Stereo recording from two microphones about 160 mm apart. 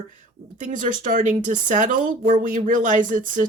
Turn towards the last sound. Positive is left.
turn(degrees=-55)  # may be behind; listen again after turning